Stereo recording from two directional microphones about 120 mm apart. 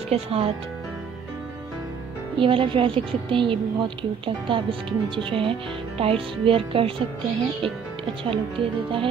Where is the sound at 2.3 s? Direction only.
45° right (ahead or behind).